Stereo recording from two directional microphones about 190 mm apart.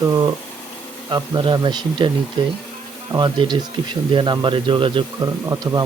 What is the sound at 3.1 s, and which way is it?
Speech, 25° right (ahead or behind).